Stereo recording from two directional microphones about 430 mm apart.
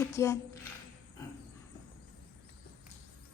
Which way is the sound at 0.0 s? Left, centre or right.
Centre.